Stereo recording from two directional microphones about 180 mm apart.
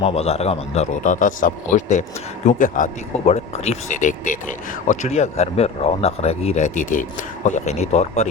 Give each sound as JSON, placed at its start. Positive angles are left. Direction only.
{"t": 0.0, "sound": "speech", "side_deg": 35}